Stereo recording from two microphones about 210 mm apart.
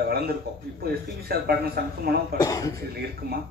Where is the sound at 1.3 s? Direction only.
45° right (ahead or behind).